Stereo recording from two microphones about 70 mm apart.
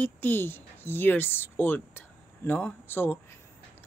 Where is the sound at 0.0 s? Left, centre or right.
Left.